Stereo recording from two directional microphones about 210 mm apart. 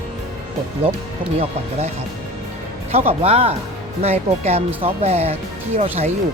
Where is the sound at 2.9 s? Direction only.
30° right (ahead or behind).